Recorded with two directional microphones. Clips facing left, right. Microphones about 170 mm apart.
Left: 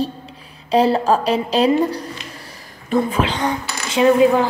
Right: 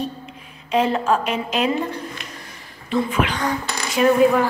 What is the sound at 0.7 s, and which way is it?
A woman's voice, 35° left (ahead or behind).